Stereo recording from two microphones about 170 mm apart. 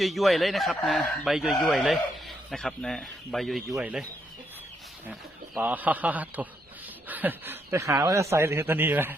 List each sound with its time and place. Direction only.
0.0 s speech: centre (ahead or behind)
5.5 s speech: 10° right (ahead or behind)